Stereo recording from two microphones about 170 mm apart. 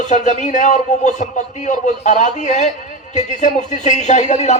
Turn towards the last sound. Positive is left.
turn(degrees=45)  # may be behind; listen again after turning